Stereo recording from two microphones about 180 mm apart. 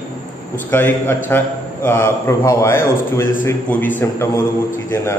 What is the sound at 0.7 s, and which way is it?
A man's voice, 10° left (ahead or behind).